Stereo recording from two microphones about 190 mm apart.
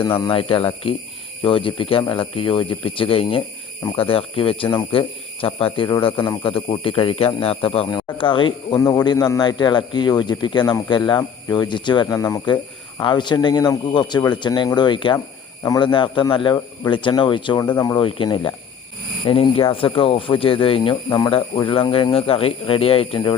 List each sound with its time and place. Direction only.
0.0 s speech: 25° left (ahead or behind)